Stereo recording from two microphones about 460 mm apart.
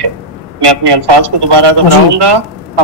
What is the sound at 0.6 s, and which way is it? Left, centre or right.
A woman's voice, right.